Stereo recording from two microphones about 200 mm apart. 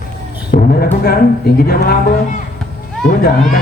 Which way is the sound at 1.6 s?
50° left (ahead or behind).